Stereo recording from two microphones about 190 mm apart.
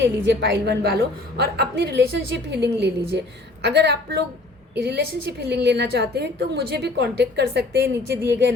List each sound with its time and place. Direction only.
0.0 s a woman's voice: 65° right (ahead or behind)